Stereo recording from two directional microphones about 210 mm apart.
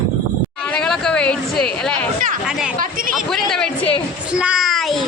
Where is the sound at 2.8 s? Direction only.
40° right (ahead or behind).